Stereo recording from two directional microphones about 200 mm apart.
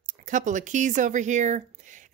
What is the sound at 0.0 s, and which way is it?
Speech, 40° right (ahead or behind).